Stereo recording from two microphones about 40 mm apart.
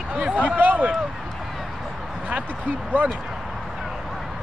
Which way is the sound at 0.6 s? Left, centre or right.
Right.